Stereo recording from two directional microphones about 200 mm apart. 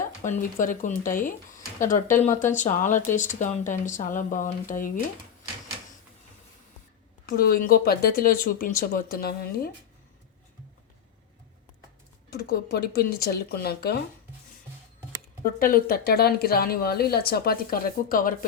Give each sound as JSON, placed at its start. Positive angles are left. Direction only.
{"t": 0.2, "sound": "speech", "side_deg": 40}
{"t": 7.3, "sound": "a woman's voice", "side_deg": 45}
{"t": 12.3, "sound": "a woman's voice", "side_deg": 50}
{"t": 15.5, "sound": "a woman's voice", "side_deg": 45}